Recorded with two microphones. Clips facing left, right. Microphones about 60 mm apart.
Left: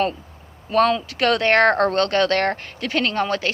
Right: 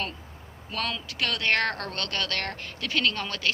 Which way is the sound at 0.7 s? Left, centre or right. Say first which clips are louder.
Left 15 dB; left.